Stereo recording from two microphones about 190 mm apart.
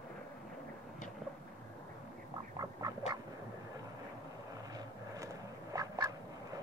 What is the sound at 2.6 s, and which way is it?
Quack, 20° right (ahead or behind).